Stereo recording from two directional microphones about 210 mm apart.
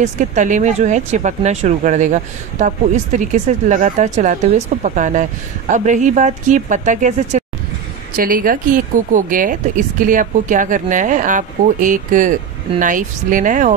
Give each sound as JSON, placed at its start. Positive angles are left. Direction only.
{"t": 0.0, "sound": "speech", "side_deg": -35}